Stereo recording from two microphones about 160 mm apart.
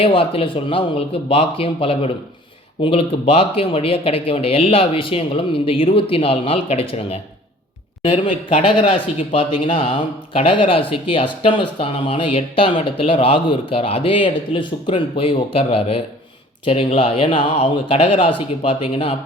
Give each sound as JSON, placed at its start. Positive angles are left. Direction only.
{"t": 0.0, "sound": "speech", "side_deg": 35}